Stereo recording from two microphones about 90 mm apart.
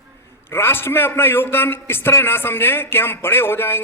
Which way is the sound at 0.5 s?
25° left (ahead or behind).